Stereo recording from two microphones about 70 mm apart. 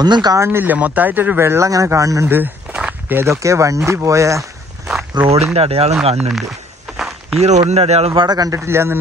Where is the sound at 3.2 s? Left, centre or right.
Right.